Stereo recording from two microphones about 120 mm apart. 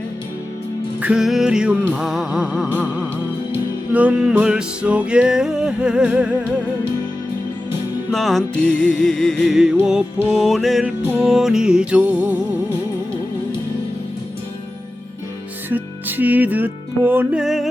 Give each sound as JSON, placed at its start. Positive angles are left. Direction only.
{"t": 1.0, "sound": "music", "side_deg": -5}
{"t": 8.1, "sound": "music", "side_deg": 0}
{"t": 8.7, "sound": "music", "side_deg": 10}
{"t": 10.8, "sound": "music", "side_deg": -15}
{"t": 11.2, "sound": "music", "side_deg": -5}
{"t": 15.7, "sound": "music", "side_deg": -15}
{"t": 17.4, "sound": "music", "side_deg": 0}